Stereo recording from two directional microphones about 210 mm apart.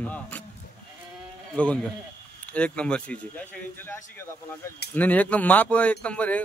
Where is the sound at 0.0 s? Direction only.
5° left (ahead or behind).